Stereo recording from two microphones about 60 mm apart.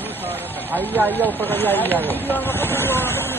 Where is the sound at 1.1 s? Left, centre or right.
Left.